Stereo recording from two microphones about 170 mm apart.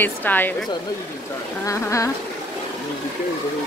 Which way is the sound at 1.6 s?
20° left (ahead or behind).